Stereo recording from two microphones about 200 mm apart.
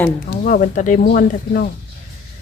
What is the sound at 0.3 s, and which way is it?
Speech, 45° left (ahead or behind).